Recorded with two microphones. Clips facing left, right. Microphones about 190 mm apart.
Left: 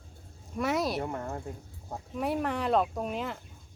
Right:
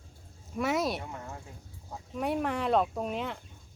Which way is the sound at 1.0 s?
50° left (ahead or behind).